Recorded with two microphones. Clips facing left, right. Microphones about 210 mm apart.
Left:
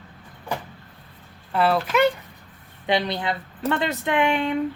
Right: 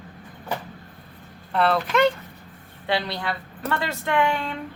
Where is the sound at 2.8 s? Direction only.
20° left (ahead or behind).